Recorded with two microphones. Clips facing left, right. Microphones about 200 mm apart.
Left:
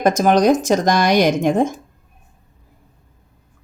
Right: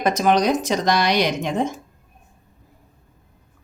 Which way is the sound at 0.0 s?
45° left (ahead or behind).